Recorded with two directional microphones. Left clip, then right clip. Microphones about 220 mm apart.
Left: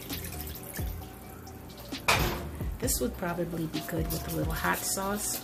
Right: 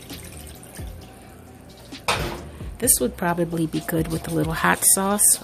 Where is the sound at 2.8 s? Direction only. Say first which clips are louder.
Right 9 dB; 50° right (ahead or behind).